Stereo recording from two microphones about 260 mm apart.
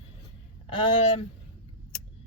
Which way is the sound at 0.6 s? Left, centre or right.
Left.